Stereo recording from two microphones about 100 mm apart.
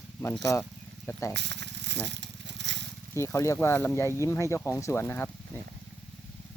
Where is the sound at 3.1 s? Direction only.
30° left (ahead or behind).